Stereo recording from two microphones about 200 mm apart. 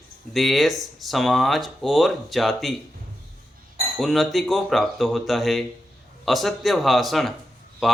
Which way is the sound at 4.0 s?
Centre (ahead or behind).